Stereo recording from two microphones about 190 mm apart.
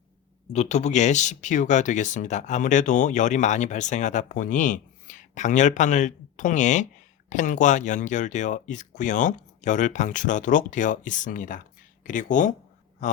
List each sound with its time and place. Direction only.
0.5 s speech: 35° left (ahead or behind)